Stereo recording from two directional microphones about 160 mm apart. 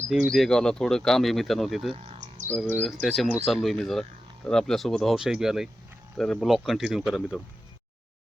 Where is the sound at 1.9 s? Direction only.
40° right (ahead or behind).